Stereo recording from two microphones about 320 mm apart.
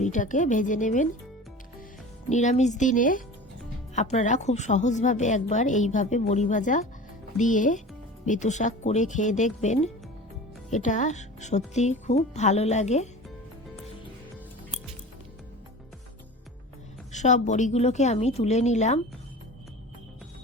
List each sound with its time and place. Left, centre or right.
0.0 s a woman's voice: left
2.3 s a woman's voice: left
17.1 s a woman's voice: left